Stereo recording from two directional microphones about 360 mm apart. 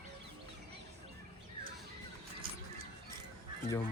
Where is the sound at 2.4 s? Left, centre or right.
Right.